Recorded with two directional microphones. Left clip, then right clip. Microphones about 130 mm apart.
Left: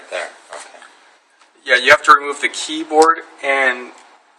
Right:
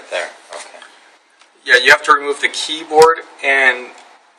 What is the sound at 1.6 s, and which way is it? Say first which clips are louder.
Speech: right 1 dB; 50° left (ahead or behind).